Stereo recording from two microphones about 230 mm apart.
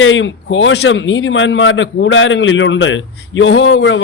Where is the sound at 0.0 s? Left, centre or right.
Left.